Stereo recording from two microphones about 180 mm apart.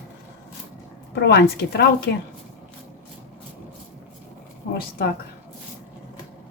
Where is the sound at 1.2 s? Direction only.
65° left (ahead or behind).